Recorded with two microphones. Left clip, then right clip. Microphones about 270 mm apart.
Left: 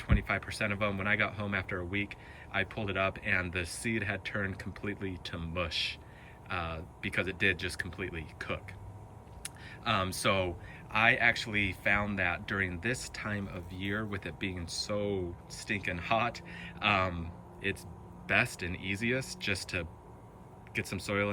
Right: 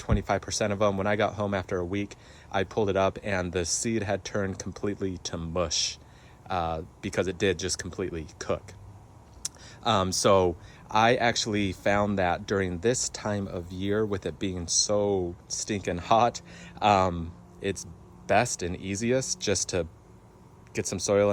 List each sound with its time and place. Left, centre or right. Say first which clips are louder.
0.0 s speech: right 5 dB; centre